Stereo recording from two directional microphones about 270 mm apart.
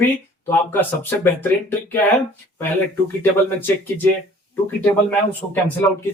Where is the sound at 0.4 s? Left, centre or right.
Centre.